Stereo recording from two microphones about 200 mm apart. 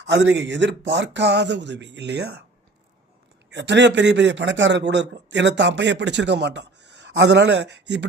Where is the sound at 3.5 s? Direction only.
60° right (ahead or behind).